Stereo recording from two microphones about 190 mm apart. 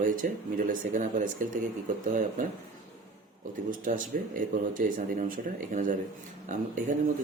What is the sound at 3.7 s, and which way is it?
A man's voice, 45° right (ahead or behind).